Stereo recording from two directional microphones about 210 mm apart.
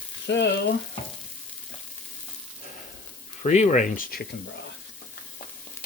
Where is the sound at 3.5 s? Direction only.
35° left (ahead or behind).